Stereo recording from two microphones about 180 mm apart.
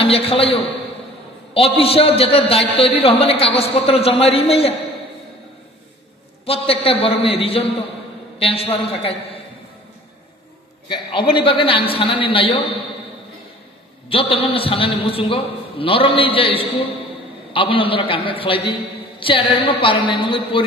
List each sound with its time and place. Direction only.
0.0 s a man's voice: 35° left (ahead or behind)
6.4 s a man's voice: 30° left (ahead or behind)
10.9 s a man's voice: 30° left (ahead or behind)
14.0 s a man's voice: 30° left (ahead or behind)